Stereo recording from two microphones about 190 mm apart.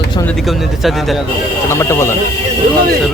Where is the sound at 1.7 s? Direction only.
15° left (ahead or behind).